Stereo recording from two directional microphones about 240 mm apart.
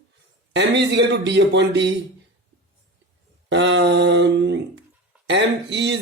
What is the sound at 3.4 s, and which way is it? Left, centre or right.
Speech, right.